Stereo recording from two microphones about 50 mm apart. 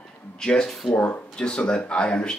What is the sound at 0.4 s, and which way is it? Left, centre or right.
Speech, centre.